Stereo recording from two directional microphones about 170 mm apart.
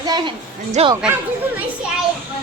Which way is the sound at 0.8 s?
40° right (ahead or behind).